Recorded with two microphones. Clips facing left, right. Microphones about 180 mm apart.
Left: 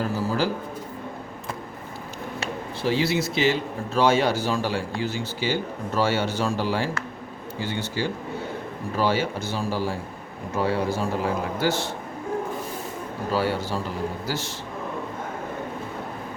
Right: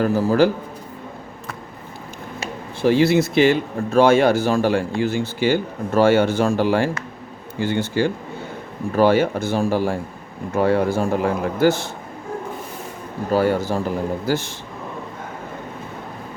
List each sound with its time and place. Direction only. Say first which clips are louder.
0.0 s a man's voice: right 8 dB; 60° right (ahead or behind)
2.8 s a man's voice: right 8 dB; 50° right (ahead or behind)
13.3 s a man's voice: right 7 dB; 50° right (ahead or behind)